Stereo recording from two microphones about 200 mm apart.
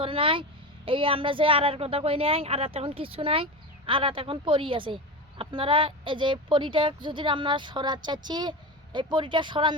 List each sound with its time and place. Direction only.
0.0 s speech: 25° right (ahead or behind)